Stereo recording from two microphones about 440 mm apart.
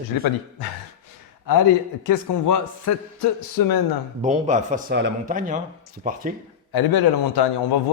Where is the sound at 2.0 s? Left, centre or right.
Left.